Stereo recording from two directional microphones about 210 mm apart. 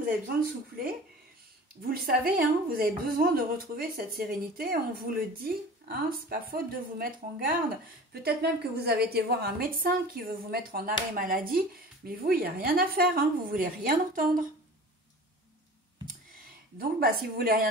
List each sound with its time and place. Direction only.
1.8 s speech: 45° right (ahead or behind)
16.7 s speech: 45° right (ahead or behind)